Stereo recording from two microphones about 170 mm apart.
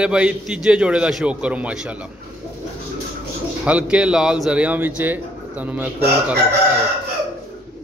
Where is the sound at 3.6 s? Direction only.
5° right (ahead or behind).